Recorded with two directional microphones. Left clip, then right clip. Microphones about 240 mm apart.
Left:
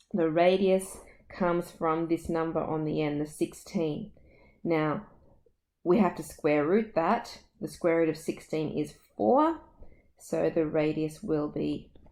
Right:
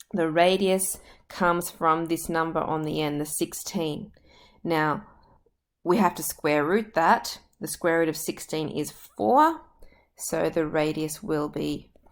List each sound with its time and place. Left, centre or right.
0.1 s a woman's voice: right
8.9 s speech: right
10.2 s a woman's voice: centre